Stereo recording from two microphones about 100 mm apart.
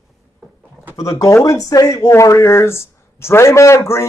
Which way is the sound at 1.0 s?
35° left (ahead or behind).